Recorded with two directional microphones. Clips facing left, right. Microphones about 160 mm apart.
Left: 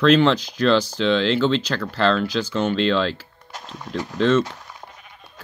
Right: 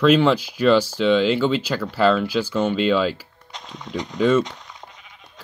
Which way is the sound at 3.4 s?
5° left (ahead or behind).